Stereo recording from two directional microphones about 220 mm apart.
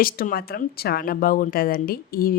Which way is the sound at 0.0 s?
40° left (ahead or behind).